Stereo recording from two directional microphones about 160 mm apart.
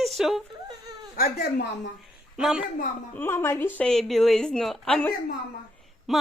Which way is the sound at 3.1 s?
15° left (ahead or behind).